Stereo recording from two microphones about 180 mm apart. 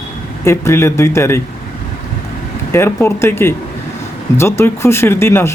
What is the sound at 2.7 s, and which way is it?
Speech, 15° left (ahead or behind).